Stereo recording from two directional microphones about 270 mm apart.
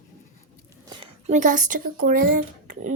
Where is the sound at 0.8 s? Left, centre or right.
Centre.